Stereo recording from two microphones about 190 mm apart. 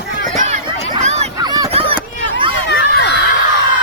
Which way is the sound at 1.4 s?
20° right (ahead or behind).